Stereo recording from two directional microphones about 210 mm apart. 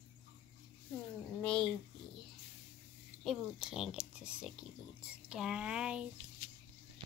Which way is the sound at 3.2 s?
Centre (ahead or behind).